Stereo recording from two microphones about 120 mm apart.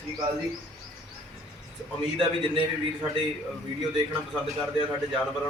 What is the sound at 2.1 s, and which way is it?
Speech, 45° right (ahead or behind).